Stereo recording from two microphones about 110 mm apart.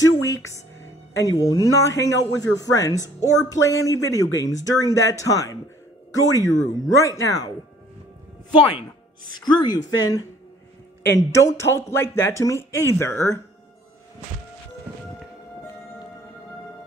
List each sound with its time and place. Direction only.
0.0 s music: 30° left (ahead or behind)
0.7 s speech: 30° left (ahead or behind)
8.5 s speech: 50° left (ahead or behind)
11.1 s speech: 25° left (ahead or behind)